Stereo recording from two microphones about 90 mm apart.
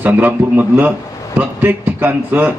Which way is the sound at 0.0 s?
20° right (ahead or behind).